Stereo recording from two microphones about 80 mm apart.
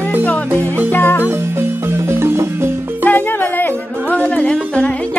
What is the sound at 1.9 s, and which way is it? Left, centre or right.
Music, right.